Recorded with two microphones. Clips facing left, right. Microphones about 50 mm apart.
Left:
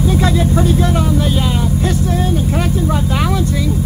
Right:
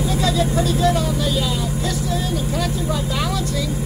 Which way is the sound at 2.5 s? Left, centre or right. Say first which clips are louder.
Left 5 dB; left.